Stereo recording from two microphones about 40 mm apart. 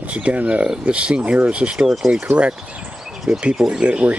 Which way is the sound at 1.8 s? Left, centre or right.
Centre.